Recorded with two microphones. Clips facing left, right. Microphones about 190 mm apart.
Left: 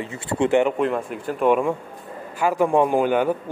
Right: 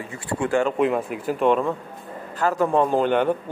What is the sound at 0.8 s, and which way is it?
Speech, 5° right (ahead or behind).